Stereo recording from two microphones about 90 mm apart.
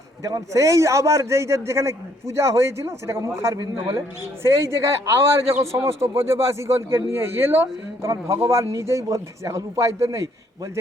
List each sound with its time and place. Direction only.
0.2 s a man's voice: 40° right (ahead or behind)